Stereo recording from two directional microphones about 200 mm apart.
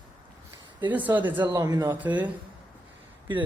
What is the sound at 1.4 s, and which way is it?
Speech, 20° right (ahead or behind).